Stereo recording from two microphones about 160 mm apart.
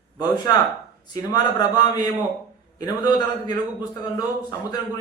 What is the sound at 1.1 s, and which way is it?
Speech, 25° left (ahead or behind).